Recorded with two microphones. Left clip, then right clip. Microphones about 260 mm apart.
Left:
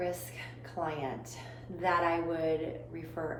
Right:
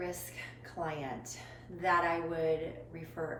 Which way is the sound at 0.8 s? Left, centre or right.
Centre.